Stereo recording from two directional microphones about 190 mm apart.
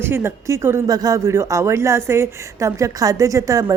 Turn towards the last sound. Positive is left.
turn(degrees=-20)  # may be behind; listen again after turning